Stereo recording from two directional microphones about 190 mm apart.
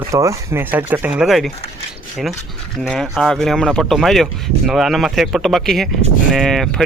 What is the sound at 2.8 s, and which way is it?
Speech, centre (ahead or behind).